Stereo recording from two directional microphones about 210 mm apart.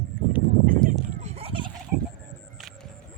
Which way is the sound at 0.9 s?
30° right (ahead or behind).